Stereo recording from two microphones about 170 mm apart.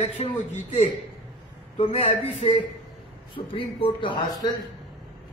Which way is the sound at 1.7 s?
35° left (ahead or behind).